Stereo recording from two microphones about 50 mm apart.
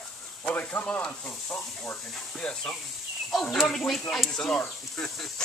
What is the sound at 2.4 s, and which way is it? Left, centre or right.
Music, centre.